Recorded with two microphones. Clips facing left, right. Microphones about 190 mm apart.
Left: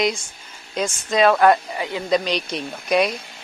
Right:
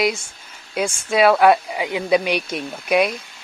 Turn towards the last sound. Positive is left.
turn(degrees=-5)  # may be behind; listen again after turning